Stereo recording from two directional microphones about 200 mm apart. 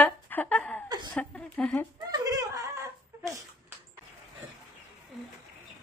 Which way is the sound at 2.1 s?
15° right (ahead or behind).